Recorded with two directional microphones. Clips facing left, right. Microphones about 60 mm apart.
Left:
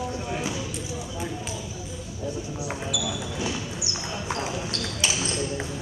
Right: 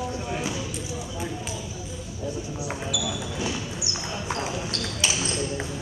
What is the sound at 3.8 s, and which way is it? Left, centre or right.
Clip-clop, centre.